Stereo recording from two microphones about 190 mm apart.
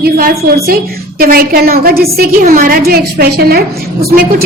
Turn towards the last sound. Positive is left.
turn(degrees=-55)  # may be behind; listen again after turning